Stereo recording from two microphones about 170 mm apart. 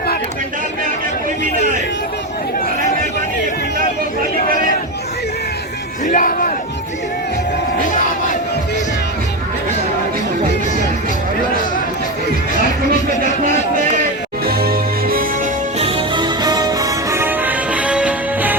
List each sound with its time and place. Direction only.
6.1 s speech: 55° left (ahead or behind)
7.9 s crowd: 50° left (ahead or behind)
14.4 s music: 60° right (ahead or behind)
15.8 s music: 30° right (ahead or behind); by 18.5 s 5° right (ahead or behind)